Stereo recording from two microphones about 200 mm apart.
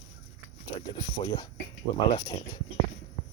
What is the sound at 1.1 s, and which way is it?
Speech, 20° left (ahead or behind).